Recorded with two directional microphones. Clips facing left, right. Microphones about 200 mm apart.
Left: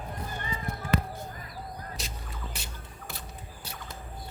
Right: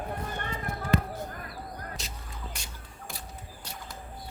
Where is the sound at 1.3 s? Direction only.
60° right (ahead or behind).